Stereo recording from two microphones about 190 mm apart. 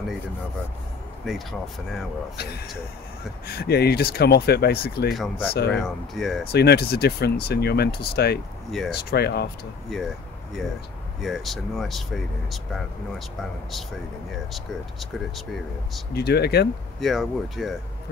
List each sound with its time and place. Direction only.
1.3 s speech: centre (ahead or behind)
2.3 s speech: 55° left (ahead or behind)
5.1 s speech: centre (ahead or behind)
6.5 s speech: 60° left (ahead or behind)
9.9 s speech: centre (ahead or behind)
11.1 s speech: centre (ahead or behind)
16.1 s speech: 60° left (ahead or behind)
17.0 s speech: centre (ahead or behind)